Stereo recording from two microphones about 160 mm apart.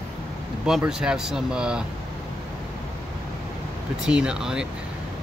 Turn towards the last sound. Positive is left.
turn(degrees=-5)  # may be behind; listen again after turning